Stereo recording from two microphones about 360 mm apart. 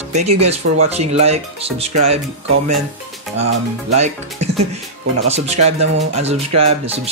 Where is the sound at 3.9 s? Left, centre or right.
Centre.